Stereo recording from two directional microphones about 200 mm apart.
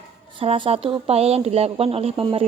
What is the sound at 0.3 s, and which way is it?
A woman's voice, 25° right (ahead or behind).